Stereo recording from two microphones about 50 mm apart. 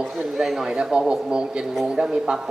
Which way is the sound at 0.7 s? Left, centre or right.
Centre.